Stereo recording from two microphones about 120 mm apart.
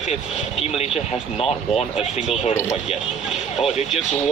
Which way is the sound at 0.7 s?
55° left (ahead or behind).